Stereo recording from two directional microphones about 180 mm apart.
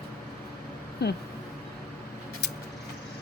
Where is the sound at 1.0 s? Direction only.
65° left (ahead or behind).